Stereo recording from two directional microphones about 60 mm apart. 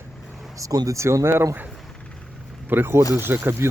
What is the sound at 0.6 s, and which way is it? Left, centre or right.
Speech, right.